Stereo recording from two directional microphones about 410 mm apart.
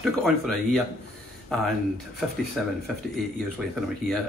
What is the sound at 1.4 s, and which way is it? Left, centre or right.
Speech, centre.